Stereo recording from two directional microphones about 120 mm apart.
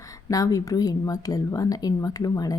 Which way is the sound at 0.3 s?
30° left (ahead or behind).